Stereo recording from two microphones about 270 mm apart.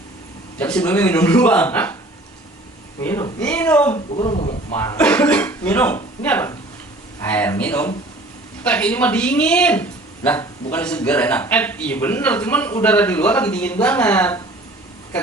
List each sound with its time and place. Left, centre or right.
0.6 s speech: centre
3.0 s speech: centre
3.9 s a woman's voice: left
4.7 s speech: centre